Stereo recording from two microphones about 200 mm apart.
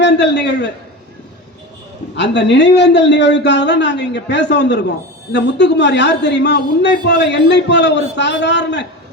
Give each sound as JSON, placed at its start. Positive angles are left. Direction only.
{"t": 0.0, "sound": "a man's voice", "side_deg": 60}
{"t": 2.1, "sound": "a man's voice", "side_deg": 60}